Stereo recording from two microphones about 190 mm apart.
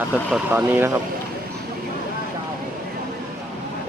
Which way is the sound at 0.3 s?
10° right (ahead or behind).